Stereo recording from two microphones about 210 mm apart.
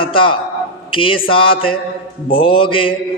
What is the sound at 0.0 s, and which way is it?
A man's voice, 25° left (ahead or behind).